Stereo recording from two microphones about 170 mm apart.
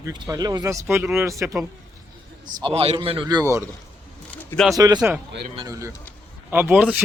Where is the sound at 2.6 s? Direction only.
30° right (ahead or behind).